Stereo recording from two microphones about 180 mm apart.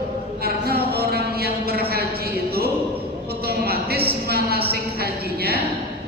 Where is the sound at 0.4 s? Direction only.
60° right (ahead or behind).